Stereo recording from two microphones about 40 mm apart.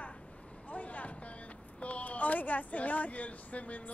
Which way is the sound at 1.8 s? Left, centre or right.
Left.